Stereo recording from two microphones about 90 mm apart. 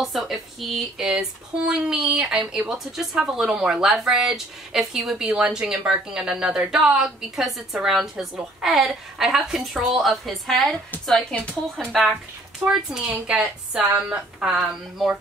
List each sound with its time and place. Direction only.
0.0 s a woman's voice: centre (ahead or behind)
11.3 s speech: 15° left (ahead or behind)
11.9 s a woman's voice: centre (ahead or behind)